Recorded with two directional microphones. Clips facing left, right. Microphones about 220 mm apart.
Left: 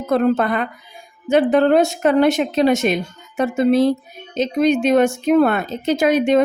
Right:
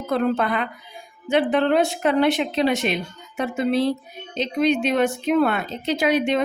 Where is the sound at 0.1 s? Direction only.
45° left (ahead or behind).